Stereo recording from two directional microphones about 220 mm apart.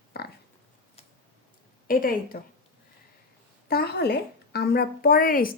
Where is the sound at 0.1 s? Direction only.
45° left (ahead or behind).